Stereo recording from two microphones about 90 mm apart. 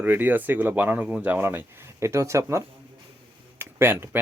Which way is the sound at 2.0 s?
35° right (ahead or behind).